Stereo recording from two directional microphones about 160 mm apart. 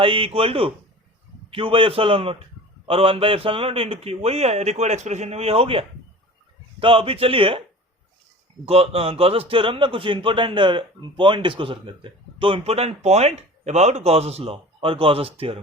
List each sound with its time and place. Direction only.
0.0 s a man's voice: 35° right (ahead or behind)
8.6 s a man's voice: 40° right (ahead or behind)